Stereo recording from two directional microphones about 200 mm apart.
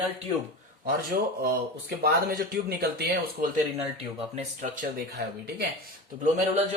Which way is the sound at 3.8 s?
30° right (ahead or behind).